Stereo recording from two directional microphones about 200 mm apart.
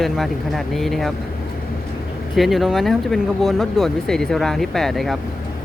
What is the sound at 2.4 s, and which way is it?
Speech, centre (ahead or behind).